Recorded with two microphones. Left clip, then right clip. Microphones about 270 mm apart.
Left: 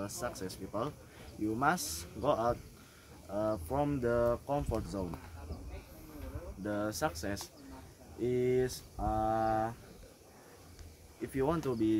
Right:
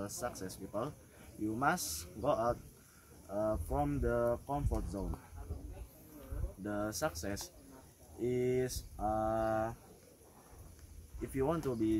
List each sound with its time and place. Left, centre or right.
0.0 s speech: centre
6.6 s speech: centre
11.3 s speech: centre